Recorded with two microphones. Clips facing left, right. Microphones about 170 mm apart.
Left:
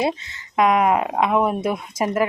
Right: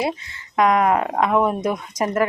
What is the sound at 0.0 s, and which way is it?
A woman's voice, 25° left (ahead or behind).